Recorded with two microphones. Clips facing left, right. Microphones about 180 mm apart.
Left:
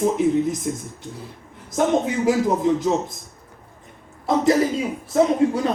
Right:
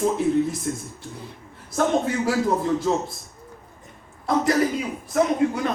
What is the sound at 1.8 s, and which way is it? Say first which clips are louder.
Speech: left 2 dB; 15° left (ahead or behind).